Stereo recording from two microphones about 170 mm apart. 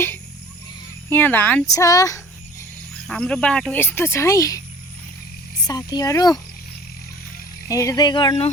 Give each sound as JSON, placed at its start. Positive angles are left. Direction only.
{"t": 1.1, "sound": "speech", "side_deg": 10}
{"t": 1.7, "sound": "speech", "side_deg": 20}
{"t": 3.1, "sound": "speech", "side_deg": 5}
{"t": 5.6, "sound": "speech", "side_deg": 25}
{"t": 7.7, "sound": "speech", "side_deg": 20}